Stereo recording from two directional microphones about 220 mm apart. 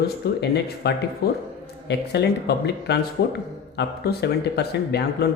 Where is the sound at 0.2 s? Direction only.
45° left (ahead or behind).